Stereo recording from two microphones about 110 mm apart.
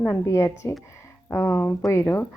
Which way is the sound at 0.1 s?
25° left (ahead or behind).